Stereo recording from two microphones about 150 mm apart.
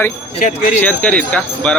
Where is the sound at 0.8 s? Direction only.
10° left (ahead or behind).